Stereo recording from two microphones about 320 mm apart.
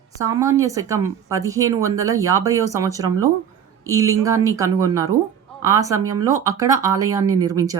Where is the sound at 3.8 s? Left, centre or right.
Centre.